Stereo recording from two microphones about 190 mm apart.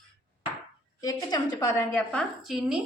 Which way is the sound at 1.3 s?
15° left (ahead or behind).